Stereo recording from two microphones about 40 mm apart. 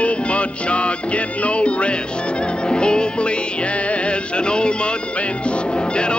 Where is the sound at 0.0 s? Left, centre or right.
Left.